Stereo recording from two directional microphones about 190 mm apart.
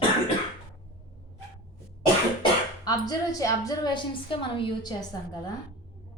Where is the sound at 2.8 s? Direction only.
20° left (ahead or behind).